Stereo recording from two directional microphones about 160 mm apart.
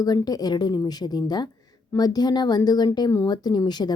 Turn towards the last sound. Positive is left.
turn(degrees=25)  # may be behind; listen again after turning